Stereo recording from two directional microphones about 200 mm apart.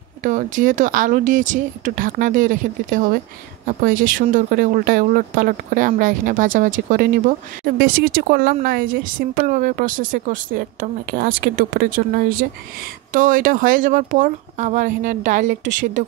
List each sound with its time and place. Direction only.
0.2 s speech: 40° right (ahead or behind)